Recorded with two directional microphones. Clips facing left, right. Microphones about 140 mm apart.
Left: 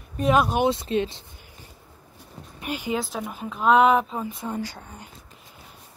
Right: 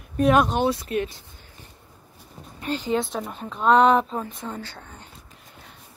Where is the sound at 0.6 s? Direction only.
25° left (ahead or behind).